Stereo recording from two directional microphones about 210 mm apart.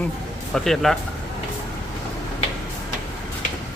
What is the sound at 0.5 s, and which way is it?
Speech, centre (ahead or behind).